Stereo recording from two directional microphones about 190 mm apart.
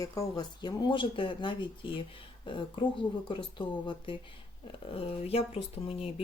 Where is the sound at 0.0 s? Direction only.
20° left (ahead or behind).